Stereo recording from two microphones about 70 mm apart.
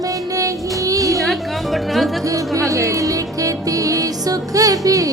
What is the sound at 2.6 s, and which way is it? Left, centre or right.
Music, right.